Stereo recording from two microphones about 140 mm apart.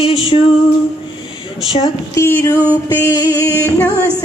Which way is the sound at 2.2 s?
15° left (ahead or behind).